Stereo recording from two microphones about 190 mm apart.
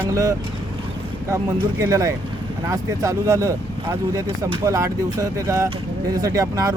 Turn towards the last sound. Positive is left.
turn(degrees=-20)  # may be behind; listen again after turning